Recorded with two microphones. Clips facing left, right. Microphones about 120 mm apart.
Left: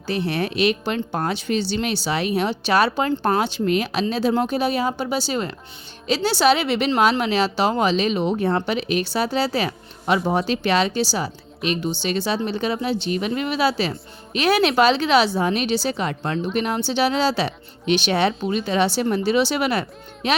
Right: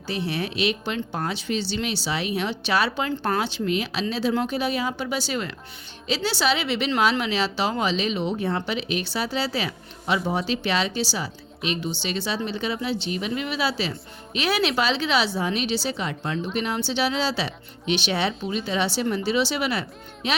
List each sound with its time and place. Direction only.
0.1 s speech: 50° left (ahead or behind)